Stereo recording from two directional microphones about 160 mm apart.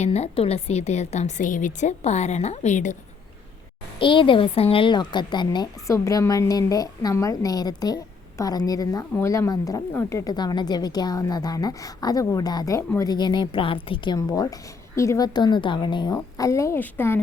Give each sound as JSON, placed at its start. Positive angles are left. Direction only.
{"t": 0.0, "sound": "a woman's voice", "side_deg": 40}
{"t": 3.9, "sound": "a woman's voice", "side_deg": 30}
{"t": 14.2, "sound": "a woman's voice", "side_deg": 20}